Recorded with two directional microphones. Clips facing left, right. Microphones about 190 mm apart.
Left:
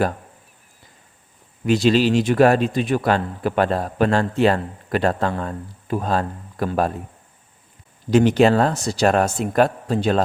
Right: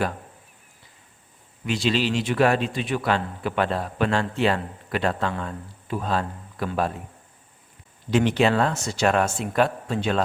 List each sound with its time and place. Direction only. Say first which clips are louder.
1.6 s a man's voice: left 7 dB; 45° left (ahead or behind)
8.1 s a man's voice: left 5 dB; 40° left (ahead or behind)